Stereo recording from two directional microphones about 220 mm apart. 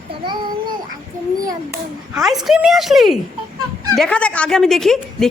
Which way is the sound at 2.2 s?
Centre (ahead or behind).